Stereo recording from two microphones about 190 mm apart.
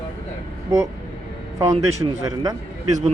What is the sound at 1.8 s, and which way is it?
A man's voice, 20° right (ahead or behind).